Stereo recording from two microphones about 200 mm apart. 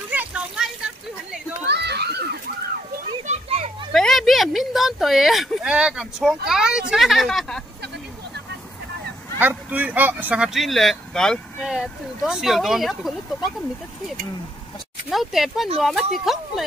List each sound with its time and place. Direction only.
0.1 s a sound: 5° right (ahead or behind)
1.7 s children playing: 55° right (ahead or behind)
3.1 s children playing: 30° right (ahead or behind)
3.9 s speech: centre (ahead or behind)
9.4 s speech: 10° right (ahead or behind)
15.0 s speech: centre (ahead or behind)